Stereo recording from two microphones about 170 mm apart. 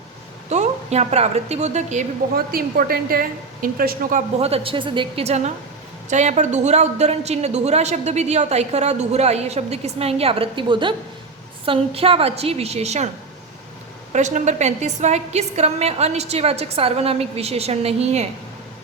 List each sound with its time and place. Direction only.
0.5 s a woman's voice: 40° right (ahead or behind)
2.3 s a woman's voice: 60° right (ahead or behind)
4.4 s a woman's voice: 35° right (ahead or behind)
14.1 s a woman's voice: 45° right (ahead or behind)